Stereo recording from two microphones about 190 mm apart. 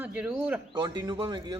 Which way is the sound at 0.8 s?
20° right (ahead or behind).